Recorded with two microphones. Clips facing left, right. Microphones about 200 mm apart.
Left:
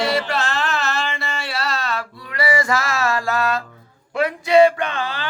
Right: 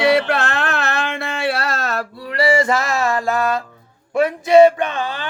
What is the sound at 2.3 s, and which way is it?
Music, 30° right (ahead or behind).